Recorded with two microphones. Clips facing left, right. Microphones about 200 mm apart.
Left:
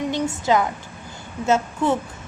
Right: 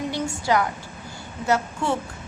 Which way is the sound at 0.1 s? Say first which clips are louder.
Left 3 dB; 20° left (ahead or behind).